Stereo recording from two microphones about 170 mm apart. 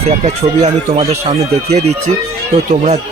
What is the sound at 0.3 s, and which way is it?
Speech, 40° right (ahead or behind).